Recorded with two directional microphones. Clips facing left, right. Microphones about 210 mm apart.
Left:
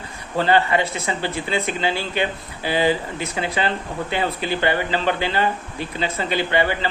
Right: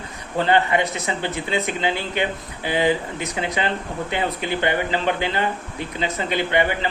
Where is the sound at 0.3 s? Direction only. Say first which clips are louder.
Left 1 dB; 20° right (ahead or behind).